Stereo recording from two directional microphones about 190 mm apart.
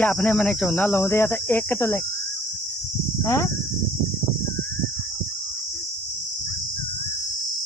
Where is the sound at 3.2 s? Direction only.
15° left (ahead or behind).